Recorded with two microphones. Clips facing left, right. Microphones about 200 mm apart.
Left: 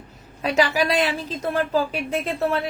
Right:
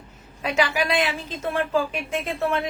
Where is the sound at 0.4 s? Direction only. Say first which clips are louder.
Left 3 dB; 35° left (ahead or behind).